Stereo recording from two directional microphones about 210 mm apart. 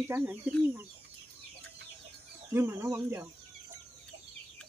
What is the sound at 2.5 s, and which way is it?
Speech, 10° right (ahead or behind).